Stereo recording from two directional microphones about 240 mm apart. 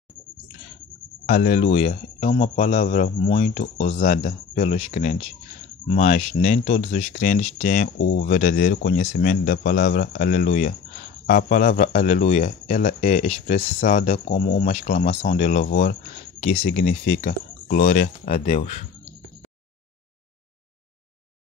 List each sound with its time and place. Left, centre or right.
1.2 s speech: left
8.0 s speech: left
8.3 s speech: left
13.7 s speech: left
14.0 s speech: left
16.3 s speech: left